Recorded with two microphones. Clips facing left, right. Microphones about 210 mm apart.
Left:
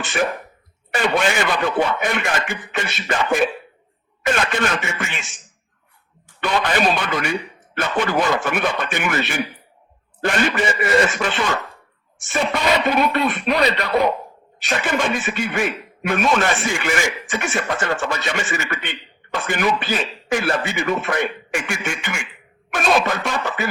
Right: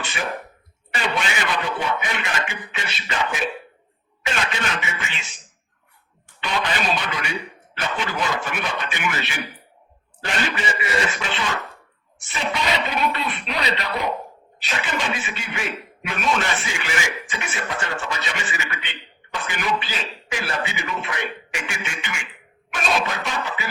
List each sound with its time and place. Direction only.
0.9 s a man's voice: 50° left (ahead or behind)
6.4 s a man's voice: 50° left (ahead or behind)